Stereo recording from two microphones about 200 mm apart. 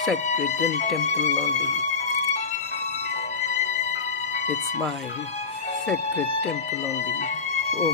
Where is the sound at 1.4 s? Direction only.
35° left (ahead or behind).